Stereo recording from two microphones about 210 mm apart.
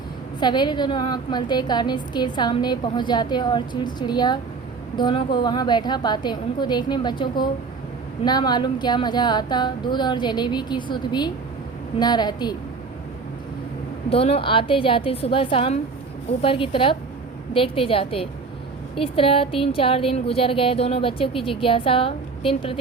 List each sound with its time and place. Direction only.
0.3 s a woman's voice: 20° left (ahead or behind)
14.1 s a woman's voice: 25° left (ahead or behind)